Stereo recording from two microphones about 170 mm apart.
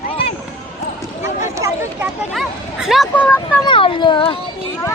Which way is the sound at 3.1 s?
10° left (ahead or behind).